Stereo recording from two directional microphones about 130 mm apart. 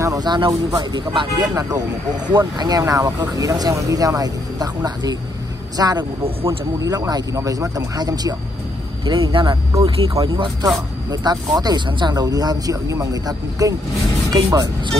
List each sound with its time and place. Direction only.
0.0 s speech: 30° right (ahead or behind)